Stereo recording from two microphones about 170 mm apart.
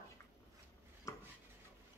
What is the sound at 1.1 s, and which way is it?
Dishes, 20° left (ahead or behind).